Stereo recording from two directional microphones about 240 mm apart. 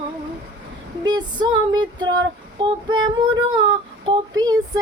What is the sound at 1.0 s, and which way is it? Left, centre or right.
Female singing, centre.